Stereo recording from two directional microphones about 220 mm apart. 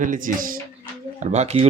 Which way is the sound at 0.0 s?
35° right (ahead or behind).